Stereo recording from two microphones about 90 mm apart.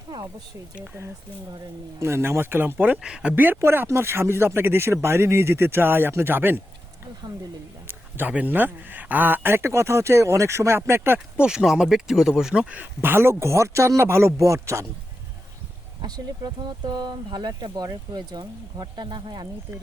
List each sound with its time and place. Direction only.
0.1 s speech: 45° right (ahead or behind)
2.0 s speech: 30° right (ahead or behind); by 3.3 s 10° right (ahead or behind)
3.3 s speech: 20° right (ahead or behind)
7.9 s speech: 20° right (ahead or behind)
11.3 s speech: 10° right (ahead or behind); by 14.8 s 35° right (ahead or behind)
16.0 s speech: 50° right (ahead or behind)